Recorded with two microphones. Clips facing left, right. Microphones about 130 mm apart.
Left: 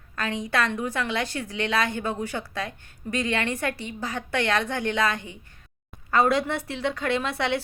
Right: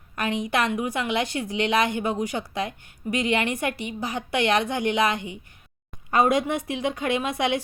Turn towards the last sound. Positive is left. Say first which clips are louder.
# right 1 dB
turn(degrees=-15)  # may be behind; listen again after turning